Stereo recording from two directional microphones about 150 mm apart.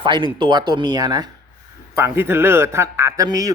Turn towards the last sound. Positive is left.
turn(degrees=-25)  # may be behind; listen again after turning